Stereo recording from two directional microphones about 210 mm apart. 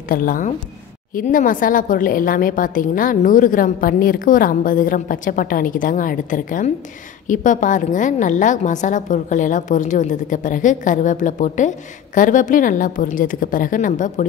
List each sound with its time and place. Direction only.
0.1 s a woman's voice: 40° left (ahead or behind)